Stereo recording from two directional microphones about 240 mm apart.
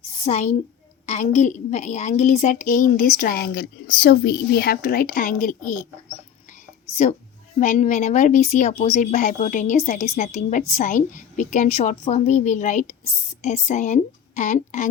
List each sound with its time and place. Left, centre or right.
0.3 s a woman's voice: left
7.6 s a woman's voice: left